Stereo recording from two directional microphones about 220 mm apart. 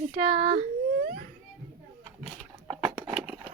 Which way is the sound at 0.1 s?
25° right (ahead or behind).